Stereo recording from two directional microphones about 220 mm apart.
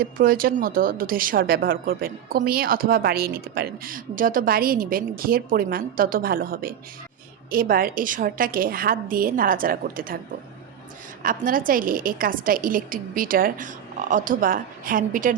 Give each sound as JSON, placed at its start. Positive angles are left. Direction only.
{"t": 0.0, "sound": "a woman's voice", "side_deg": -40}
{"t": 11.2, "sound": "a woman's voice", "side_deg": -40}